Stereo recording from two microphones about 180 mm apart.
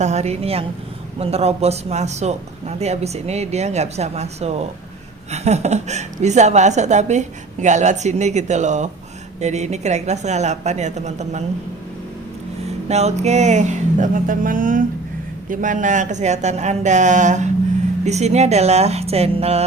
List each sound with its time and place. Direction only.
0.0 s a woman's voice: 40° right (ahead or behind)
12.9 s a woman's voice: 40° right (ahead or behind)